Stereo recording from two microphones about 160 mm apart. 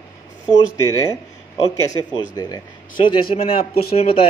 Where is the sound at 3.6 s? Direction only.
70° left (ahead or behind).